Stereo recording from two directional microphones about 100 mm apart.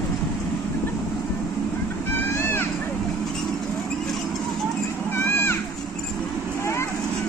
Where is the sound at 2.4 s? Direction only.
25° left (ahead or behind).